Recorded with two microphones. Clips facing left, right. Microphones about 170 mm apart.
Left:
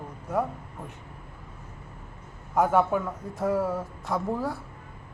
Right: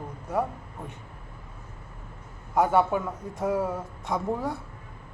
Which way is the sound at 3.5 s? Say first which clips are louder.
Left 1 dB; 15° right (ahead or behind).